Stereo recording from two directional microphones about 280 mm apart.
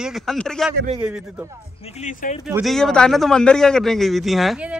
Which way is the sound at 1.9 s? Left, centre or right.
Left.